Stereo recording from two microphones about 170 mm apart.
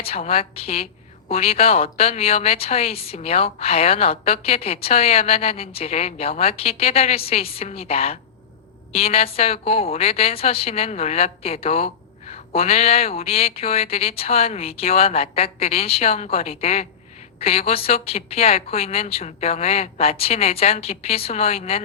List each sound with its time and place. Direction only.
0.0 s speech: 35° left (ahead or behind)